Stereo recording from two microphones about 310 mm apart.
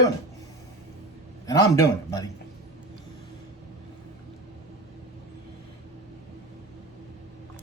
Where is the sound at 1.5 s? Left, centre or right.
Centre.